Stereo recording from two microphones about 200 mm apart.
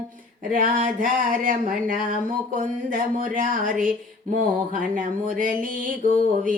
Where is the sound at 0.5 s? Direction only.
45° right (ahead or behind).